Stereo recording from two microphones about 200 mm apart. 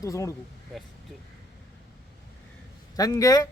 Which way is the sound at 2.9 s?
15° left (ahead or behind).